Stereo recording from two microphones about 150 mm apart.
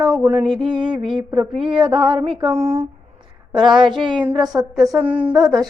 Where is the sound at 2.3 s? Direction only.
40° right (ahead or behind).